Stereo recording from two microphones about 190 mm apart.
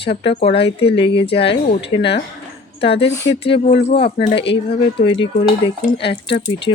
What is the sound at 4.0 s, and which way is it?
Speech, 55° left (ahead or behind).